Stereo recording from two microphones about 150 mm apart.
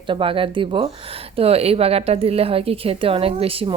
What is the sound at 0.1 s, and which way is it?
A woman's voice, 35° right (ahead or behind).